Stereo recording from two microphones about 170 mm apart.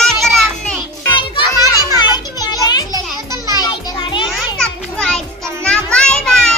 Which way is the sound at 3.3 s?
25° left (ahead or behind).